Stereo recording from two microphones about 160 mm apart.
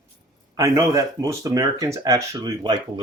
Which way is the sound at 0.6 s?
20° right (ahead or behind).